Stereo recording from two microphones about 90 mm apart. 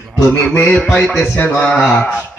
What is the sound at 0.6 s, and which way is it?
A man's voice, 15° left (ahead or behind).